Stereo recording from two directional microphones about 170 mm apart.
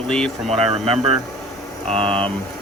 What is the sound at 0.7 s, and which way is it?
Speech, 35° right (ahead or behind).